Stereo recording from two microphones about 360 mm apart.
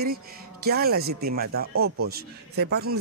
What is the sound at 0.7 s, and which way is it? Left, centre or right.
Speech, right.